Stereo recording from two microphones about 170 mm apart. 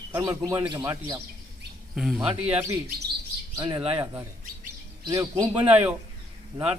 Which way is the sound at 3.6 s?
30° right (ahead or behind).